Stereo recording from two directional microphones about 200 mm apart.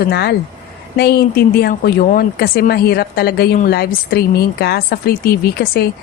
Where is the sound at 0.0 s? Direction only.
55° left (ahead or behind).